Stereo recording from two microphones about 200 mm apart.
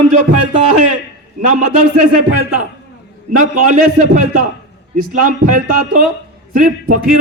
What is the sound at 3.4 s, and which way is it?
A man's voice, 40° right (ahead or behind).